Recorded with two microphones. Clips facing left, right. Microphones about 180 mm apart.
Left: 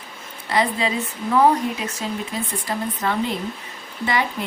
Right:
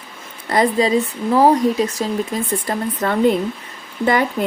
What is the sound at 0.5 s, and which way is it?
Speech, 40° right (ahead or behind).